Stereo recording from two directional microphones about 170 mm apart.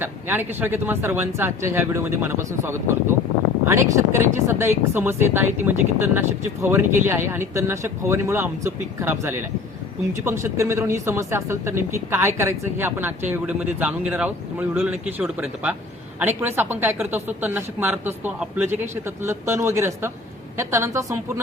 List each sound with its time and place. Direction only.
0.0 s speech: 10° right (ahead or behind)